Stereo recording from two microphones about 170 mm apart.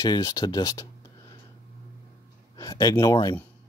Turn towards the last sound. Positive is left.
turn(degrees=20)  # may be behind; listen again after turning